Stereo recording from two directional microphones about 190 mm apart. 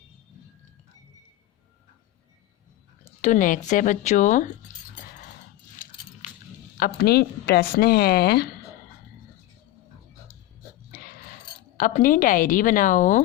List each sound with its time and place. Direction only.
3.0 s speech: 40° left (ahead or behind)
6.7 s a woman's voice: 50° left (ahead or behind)
11.8 s speech: 45° left (ahead or behind)